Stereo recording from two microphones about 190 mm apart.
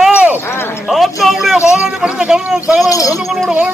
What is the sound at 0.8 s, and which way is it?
Speech, centre (ahead or behind).